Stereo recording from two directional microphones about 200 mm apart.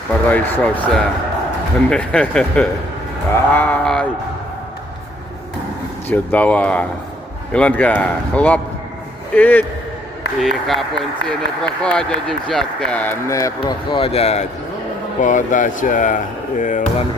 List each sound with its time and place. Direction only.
0.1 s speech: 10° left (ahead or behind)
3.3 s sheep: 10° left (ahead or behind)
6.1 s speech: 5° left (ahead or behind); by 16.8 s 40° left (ahead or behind)